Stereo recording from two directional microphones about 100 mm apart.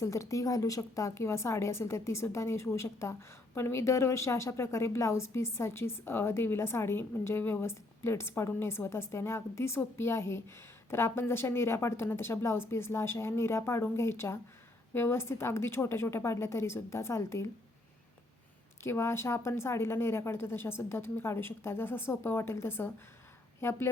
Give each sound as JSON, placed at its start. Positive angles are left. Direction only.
{"t": 0.0, "sound": "a woman's voice", "side_deg": 30}
{"t": 18.8, "sound": "a woman's voice", "side_deg": 25}